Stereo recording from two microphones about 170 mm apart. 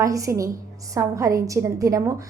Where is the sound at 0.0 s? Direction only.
20° right (ahead or behind).